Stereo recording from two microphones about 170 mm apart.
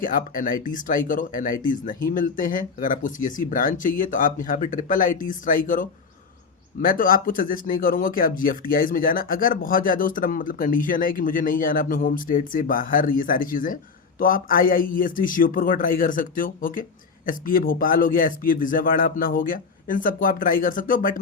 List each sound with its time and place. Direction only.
0.0 s speech: 50° left (ahead or behind)